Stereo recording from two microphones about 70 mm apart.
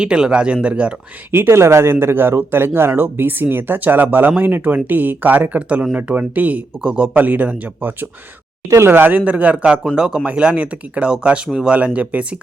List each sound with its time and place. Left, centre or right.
0.0 s speech: centre
1.3 s speech: right; by 12.4 s centre